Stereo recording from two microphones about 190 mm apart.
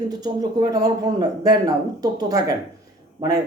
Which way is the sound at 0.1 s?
20° right (ahead or behind).